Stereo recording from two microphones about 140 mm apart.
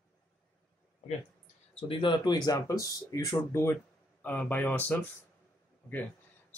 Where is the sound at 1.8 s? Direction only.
40° left (ahead or behind); by 5.0 s 10° left (ahead or behind).